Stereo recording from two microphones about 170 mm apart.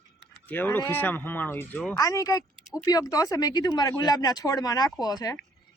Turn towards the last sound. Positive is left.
turn(degrees=20)  # may be behind; listen again after turning